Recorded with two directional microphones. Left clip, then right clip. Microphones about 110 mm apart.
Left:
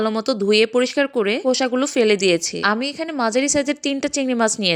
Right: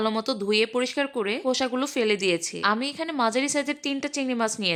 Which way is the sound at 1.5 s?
30° left (ahead or behind).